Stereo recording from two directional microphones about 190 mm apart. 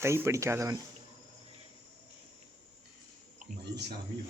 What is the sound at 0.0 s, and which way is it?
Speech, 15° right (ahead or behind).